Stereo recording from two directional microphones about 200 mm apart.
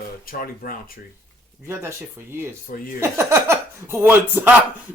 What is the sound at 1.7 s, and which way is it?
Speech, 10° right (ahead or behind).